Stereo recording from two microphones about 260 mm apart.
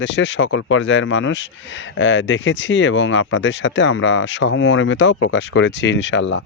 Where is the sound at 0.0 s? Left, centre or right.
Left.